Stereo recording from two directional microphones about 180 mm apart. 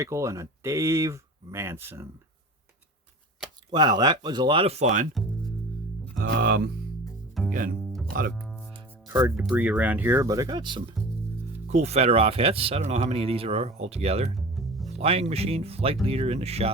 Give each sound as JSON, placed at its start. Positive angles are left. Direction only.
{"t": 0.0, "sound": "speech", "side_deg": -15}
{"t": 3.7, "sound": "speech", "side_deg": -25}
{"t": 6.2, "sound": "speech", "side_deg": -65}
{"t": 7.4, "sound": "double bass", "side_deg": 0}
{"t": 8.4, "sound": "music", "side_deg": 5}
{"t": 9.0, "sound": "music", "side_deg": -15}
{"t": 9.3, "sound": "speech", "side_deg": -5}
{"t": 11.7, "sound": "speech", "side_deg": -35}
{"t": 14.3, "sound": "music", "side_deg": 0}
{"t": 14.8, "sound": "speech", "side_deg": -35}